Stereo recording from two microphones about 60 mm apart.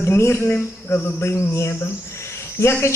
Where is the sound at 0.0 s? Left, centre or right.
Left.